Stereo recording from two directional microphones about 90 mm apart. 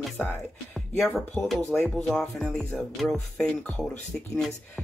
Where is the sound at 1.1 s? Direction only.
Centre (ahead or behind).